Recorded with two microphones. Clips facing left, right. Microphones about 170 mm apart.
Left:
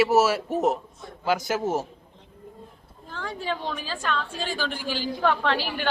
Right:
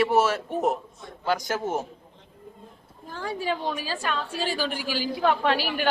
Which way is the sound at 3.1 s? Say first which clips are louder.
Right 2 dB; 10° right (ahead or behind).